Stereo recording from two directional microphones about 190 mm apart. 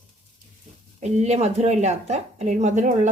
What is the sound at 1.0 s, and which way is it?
Speech, 35° right (ahead or behind).